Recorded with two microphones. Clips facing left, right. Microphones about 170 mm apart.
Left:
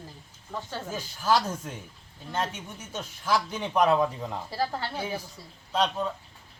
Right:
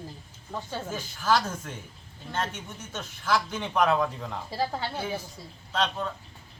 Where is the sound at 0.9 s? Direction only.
10° left (ahead or behind).